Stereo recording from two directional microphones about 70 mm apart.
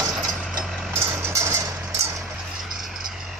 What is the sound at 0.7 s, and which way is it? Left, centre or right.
Hammer, centre.